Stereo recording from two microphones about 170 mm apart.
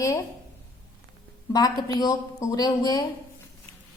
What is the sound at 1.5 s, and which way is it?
A woman's voice, 25° left (ahead or behind).